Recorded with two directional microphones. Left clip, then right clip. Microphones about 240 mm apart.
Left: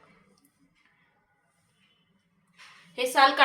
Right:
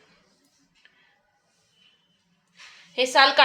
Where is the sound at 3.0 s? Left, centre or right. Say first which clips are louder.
Right 3 dB; right.